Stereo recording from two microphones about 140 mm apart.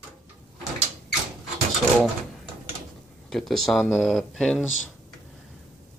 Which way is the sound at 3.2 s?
5° left (ahead or behind).